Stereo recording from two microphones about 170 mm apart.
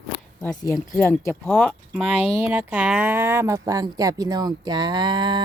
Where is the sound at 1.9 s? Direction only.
10° right (ahead or behind); by 5.4 s 25° right (ahead or behind).